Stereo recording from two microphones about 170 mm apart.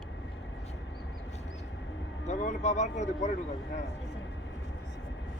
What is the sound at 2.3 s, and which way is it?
Speech, 45° left (ahead or behind).